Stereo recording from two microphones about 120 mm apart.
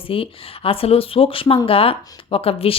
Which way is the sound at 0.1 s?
50° left (ahead or behind).